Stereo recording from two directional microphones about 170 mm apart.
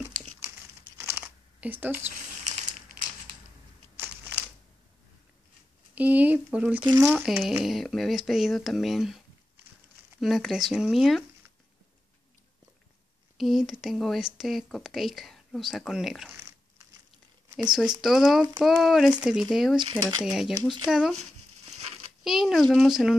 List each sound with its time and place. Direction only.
0.9 s a sound: 15° right (ahead or behind)
4.0 s a sound: 10° right (ahead or behind)
5.9 s speech: 10° right (ahead or behind)
10.2 s speech: centre (ahead or behind)
13.4 s speech: centre (ahead or behind)
17.6 s speech: 5° right (ahead or behind)
19.8 s speech: 25° right (ahead or behind)
20.2 s speech: centre (ahead or behind)
22.2 s speech: centre (ahead or behind)